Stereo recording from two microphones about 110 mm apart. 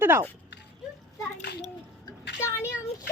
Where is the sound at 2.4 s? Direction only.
25° left (ahead or behind).